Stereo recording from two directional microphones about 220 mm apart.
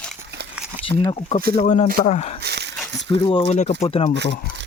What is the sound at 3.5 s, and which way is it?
Speech, 30° left (ahead or behind).